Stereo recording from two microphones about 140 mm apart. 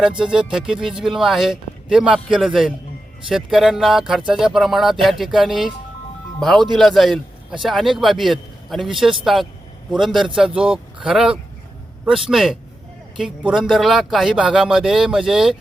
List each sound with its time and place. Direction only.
0.0 s speech: 5° right (ahead or behind)